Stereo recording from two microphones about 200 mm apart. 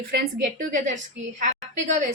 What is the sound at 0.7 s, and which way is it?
Speech, 40° right (ahead or behind).